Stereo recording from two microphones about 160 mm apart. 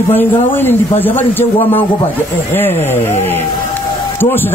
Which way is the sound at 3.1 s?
40° left (ahead or behind).